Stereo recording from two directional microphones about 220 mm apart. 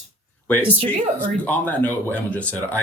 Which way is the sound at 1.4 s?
5° left (ahead or behind).